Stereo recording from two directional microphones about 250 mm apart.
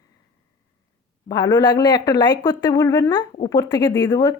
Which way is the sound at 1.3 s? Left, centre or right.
Centre.